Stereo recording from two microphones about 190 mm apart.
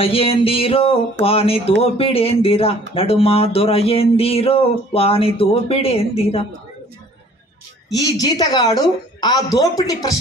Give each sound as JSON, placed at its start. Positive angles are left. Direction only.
{"t": 0.0, "sound": "speech", "side_deg": 30}
{"t": 8.2, "sound": "speech", "side_deg": 20}